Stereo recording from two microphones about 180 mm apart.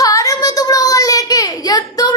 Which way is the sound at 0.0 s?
20° left (ahead or behind).